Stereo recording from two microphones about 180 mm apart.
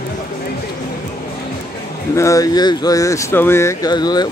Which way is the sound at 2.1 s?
15° left (ahead or behind).